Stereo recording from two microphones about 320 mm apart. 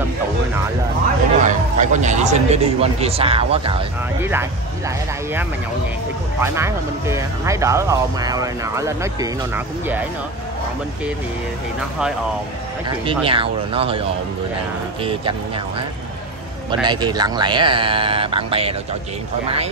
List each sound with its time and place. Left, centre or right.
1.4 s speech: right; by 4.5 s centre
6.4 s speech: centre
12.8 s speech: centre
16.8 s speech: centre